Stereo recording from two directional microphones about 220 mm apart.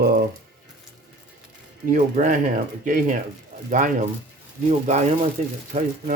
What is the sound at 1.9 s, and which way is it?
Speech, 35° right (ahead or behind).